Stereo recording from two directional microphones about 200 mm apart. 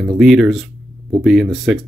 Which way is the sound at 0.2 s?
Centre (ahead or behind).